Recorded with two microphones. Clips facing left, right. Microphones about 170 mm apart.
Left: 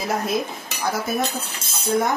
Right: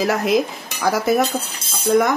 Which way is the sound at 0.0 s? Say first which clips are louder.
Right 6 dB; 80° right.